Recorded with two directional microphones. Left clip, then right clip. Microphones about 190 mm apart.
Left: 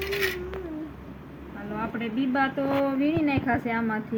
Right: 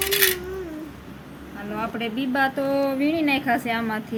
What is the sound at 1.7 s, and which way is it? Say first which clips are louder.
A woman's voice: right 3 dB; 30° right (ahead or behind).